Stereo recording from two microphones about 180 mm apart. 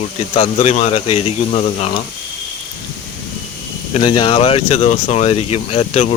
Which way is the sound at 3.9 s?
25° left (ahead or behind).